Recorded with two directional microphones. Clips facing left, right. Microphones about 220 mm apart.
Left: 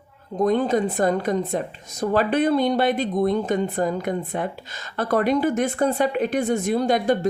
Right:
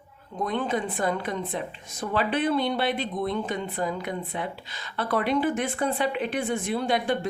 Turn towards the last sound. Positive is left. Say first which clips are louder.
# left 6 dB
turn(degrees=40)  # may be behind; listen again after turning